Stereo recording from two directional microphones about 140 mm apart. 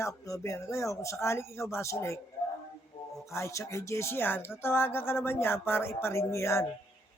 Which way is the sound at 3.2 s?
20° left (ahead or behind).